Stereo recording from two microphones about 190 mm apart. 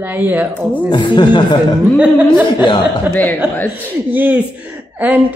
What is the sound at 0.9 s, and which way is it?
Speech, 25° left (ahead or behind).